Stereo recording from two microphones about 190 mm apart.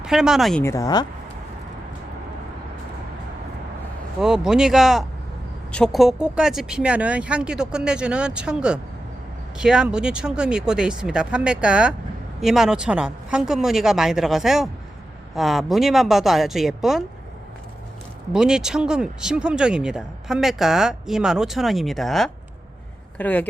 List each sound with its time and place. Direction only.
0.0 s speech: 5° right (ahead or behind)
0.6 s speech: 15° left (ahead or behind)
4.2 s speech: 5° right (ahead or behind)
18.3 s speech: 5° right (ahead or behind)